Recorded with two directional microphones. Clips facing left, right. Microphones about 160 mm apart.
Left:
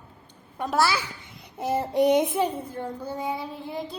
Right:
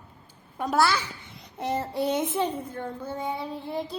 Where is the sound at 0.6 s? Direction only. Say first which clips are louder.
Even; centre (ahead or behind).